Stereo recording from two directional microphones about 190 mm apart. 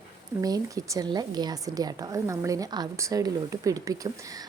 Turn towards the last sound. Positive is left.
turn(degrees=-20)  # may be behind; listen again after turning